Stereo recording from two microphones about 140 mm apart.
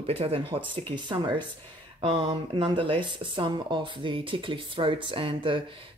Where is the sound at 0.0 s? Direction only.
45° right (ahead or behind).